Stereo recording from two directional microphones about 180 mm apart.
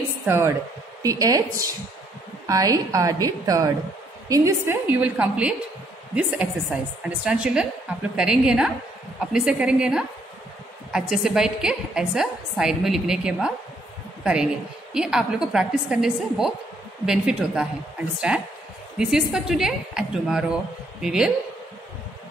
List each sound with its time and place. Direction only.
0.2 s a woman's voice: 15° right (ahead or behind)